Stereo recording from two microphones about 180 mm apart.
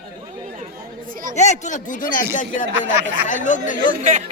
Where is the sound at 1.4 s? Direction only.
40° left (ahead or behind).